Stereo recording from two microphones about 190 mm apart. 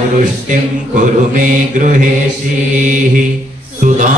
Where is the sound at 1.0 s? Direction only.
40° right (ahead or behind).